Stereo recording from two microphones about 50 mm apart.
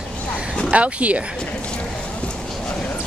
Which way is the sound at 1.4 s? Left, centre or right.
Centre.